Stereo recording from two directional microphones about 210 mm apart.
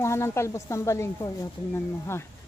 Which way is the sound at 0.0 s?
10° left (ahead or behind).